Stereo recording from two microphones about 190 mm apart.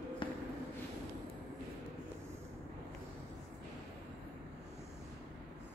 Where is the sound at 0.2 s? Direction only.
25° left (ahead or behind).